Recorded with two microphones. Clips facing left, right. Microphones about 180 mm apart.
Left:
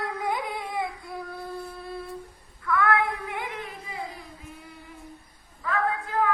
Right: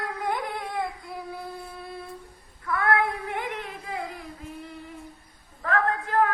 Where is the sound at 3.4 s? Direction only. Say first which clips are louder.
Right 2 dB; 55° right (ahead or behind).